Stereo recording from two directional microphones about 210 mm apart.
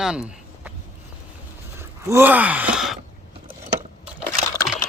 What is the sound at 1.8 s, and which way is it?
Groan, 10° right (ahead or behind).